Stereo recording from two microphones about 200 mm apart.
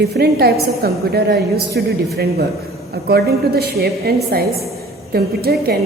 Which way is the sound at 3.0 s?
50° right (ahead or behind).